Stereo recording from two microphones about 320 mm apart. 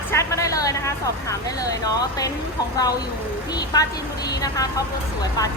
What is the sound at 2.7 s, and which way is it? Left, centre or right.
Speech, centre.